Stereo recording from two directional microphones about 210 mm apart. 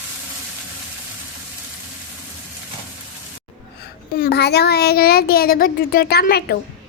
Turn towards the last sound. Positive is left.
turn(degrees=50)  # may be behind; listen again after turning